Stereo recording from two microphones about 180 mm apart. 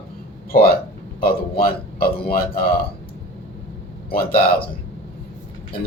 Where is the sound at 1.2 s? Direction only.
55° left (ahead or behind).